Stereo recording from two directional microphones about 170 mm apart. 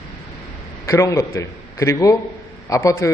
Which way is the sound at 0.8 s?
20° left (ahead or behind).